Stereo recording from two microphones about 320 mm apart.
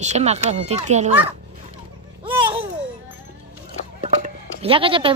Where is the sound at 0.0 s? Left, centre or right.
Right.